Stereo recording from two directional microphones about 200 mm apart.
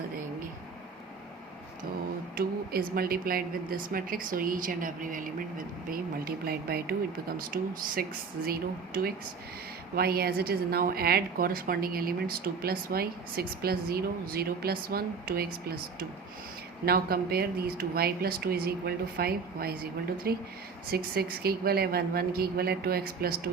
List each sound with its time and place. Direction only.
2.3 s speech: 50° right (ahead or behind)
16.8 s speech: 50° right (ahead or behind)